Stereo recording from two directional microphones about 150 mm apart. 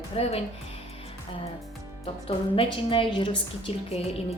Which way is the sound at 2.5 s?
35° left (ahead or behind).